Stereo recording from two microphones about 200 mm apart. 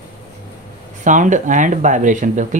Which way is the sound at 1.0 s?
40° right (ahead or behind).